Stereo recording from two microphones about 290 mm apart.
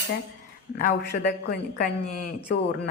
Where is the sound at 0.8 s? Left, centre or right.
Left.